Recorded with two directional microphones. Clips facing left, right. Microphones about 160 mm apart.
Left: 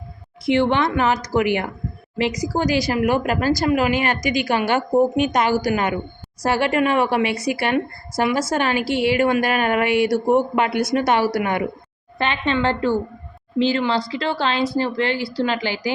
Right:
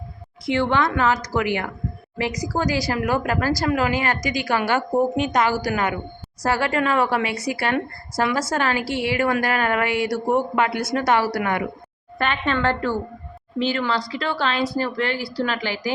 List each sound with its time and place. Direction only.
0.4 s a woman's voice: 25° left (ahead or behind)